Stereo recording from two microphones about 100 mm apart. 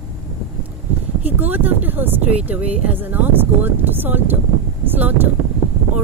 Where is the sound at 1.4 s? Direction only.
20° right (ahead or behind).